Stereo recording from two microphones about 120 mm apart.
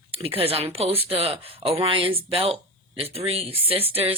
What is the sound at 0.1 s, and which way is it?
Speech, 50° right (ahead or behind).